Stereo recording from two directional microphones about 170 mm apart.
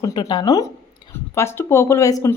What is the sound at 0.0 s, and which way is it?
A woman's voice, 25° left (ahead or behind).